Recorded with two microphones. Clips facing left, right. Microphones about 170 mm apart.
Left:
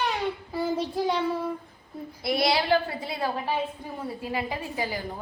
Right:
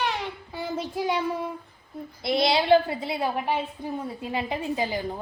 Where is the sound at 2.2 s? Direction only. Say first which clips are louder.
Right 2 dB; 25° right (ahead or behind).